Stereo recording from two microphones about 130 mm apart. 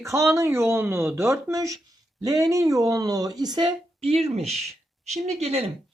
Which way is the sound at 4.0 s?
50° right (ahead or behind).